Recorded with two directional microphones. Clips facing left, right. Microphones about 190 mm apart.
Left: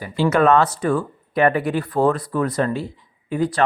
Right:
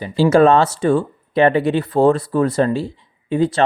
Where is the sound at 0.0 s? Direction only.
25° right (ahead or behind).